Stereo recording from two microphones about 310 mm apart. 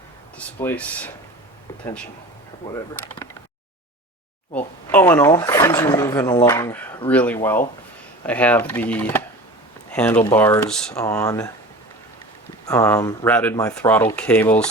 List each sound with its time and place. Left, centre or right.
0.3 s speech: centre
2.6 s speech: centre
4.5 s speech: centre
12.6 s speech: centre